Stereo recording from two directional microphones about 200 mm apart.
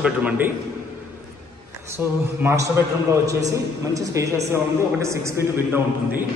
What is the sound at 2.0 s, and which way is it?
A man's voice, 10° right (ahead or behind).